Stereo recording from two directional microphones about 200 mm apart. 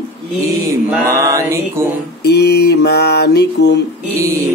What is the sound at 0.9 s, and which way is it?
Mantra, 15° right (ahead or behind).